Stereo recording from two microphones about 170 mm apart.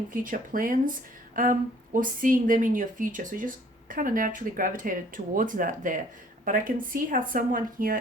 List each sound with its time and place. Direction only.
0.1 s a woman's voice: 55° right (ahead or behind)